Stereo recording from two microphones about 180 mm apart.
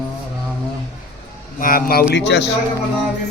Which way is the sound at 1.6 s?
50° left (ahead or behind).